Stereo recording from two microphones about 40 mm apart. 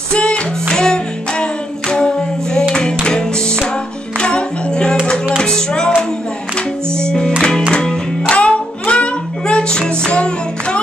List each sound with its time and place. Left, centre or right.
0.1 s music: left
8.4 s music: left